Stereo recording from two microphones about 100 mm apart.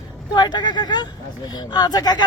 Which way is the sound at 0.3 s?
45° left (ahead or behind).